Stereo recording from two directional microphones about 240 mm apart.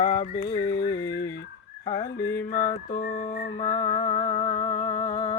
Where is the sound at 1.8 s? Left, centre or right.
Centre.